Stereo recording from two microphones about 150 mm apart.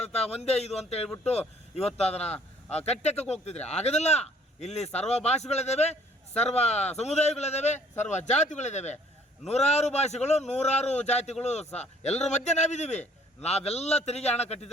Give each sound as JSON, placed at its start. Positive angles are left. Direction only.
{"t": 0.0, "sound": "speech", "side_deg": 45}